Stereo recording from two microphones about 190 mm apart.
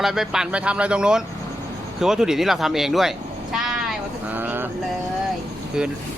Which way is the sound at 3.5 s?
Centre (ahead or behind).